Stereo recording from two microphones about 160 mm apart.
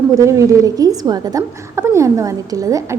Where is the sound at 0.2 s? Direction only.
20° right (ahead or behind).